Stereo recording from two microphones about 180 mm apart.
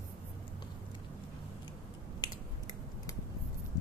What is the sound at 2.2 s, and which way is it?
Finger snapping, 25° left (ahead or behind).